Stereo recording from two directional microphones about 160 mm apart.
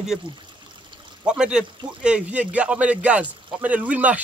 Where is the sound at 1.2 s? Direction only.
5° right (ahead or behind).